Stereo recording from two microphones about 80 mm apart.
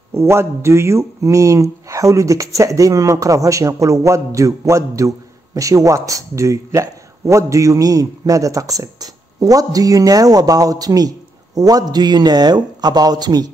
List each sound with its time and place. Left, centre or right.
0.1 s speech: right